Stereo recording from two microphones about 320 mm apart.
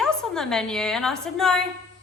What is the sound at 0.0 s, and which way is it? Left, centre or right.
A woman's voice, centre.